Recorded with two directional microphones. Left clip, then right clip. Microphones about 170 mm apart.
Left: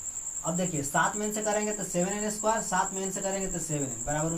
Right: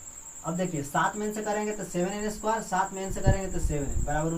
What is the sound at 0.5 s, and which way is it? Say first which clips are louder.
Speech: even; 20° left (ahead or behind).